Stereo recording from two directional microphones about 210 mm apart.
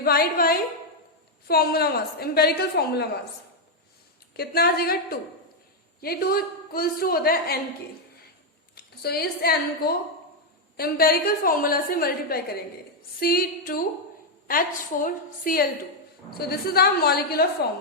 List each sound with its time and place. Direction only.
0.0 s a woman's voice: 45° left (ahead or behind)
4.4 s a woman's voice: 50° left (ahead or behind)
8.7 s a woman's voice: 50° left (ahead or behind)
15.0 s a woman's voice: 40° left (ahead or behind)